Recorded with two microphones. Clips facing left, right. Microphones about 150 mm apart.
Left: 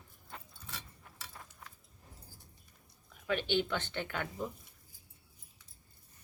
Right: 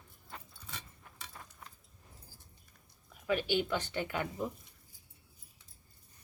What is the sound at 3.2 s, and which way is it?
Speech, 10° right (ahead or behind).